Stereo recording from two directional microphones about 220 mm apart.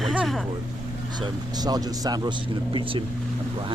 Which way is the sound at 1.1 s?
20° right (ahead or behind).